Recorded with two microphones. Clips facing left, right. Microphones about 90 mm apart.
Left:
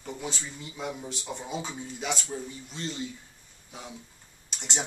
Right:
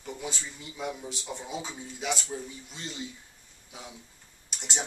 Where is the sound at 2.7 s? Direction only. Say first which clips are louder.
Left 5 dB; 10° right (ahead or behind).